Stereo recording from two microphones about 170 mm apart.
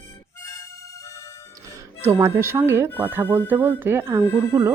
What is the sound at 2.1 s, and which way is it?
Speech, 15° right (ahead or behind).